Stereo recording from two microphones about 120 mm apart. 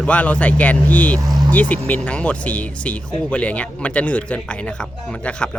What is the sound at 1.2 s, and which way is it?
Vehicle, 35° right (ahead or behind).